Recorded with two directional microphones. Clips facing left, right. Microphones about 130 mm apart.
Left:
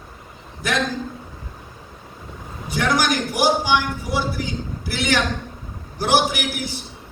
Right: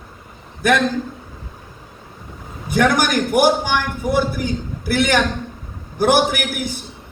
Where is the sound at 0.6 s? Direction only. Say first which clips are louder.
Right 7 dB; 55° right (ahead or behind).